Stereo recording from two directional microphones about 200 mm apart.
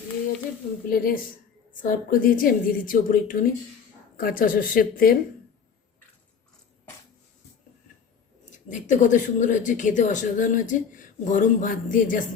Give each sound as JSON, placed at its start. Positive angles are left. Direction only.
{"t": 0.9, "sound": "a woman's voice", "side_deg": 45}
{"t": 8.4, "sound": "speech", "side_deg": 40}